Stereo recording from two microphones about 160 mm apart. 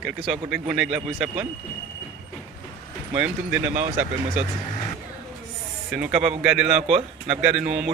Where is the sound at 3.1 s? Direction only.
10° right (ahead or behind).